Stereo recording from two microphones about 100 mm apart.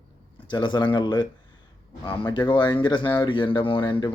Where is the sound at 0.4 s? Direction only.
50° left (ahead or behind).